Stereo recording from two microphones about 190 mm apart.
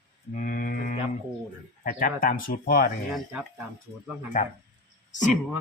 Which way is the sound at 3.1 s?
5° right (ahead or behind).